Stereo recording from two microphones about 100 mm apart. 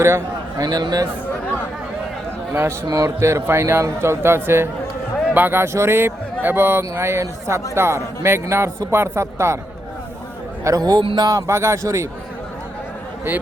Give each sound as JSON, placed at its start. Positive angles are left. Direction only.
{"t": 0.6, "sound": "speech", "side_deg": -45}
{"t": 2.5, "sound": "a man's voice", "side_deg": -25}
{"t": 10.6, "sound": "a man's voice", "side_deg": -35}
{"t": 11.0, "sound": "speech", "side_deg": -55}
{"t": 11.3, "sound": "a man's voice", "side_deg": -30}